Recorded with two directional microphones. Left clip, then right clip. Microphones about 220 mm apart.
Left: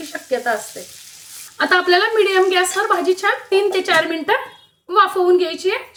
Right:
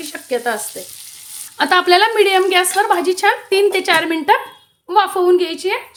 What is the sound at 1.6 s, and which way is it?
A woman's voice, 30° right (ahead or behind).